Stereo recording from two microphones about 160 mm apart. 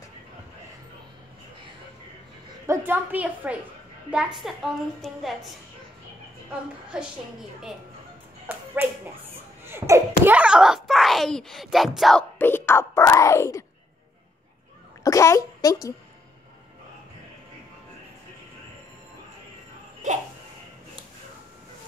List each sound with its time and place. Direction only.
2.6 s a woman's voice: 15° right (ahead or behind)
6.9 s a child's voice: 5° right (ahead or behind)
8.5 s speech: 10° right (ahead or behind)
9.7 s a child's voice: 15° right (ahead or behind); by 12.3 s centre (ahead or behind)
12.4 s speech: 15° left (ahead or behind)
15.0 s a woman's voice: 20° left (ahead or behind)
20.0 s a sound: 50° right (ahead or behind)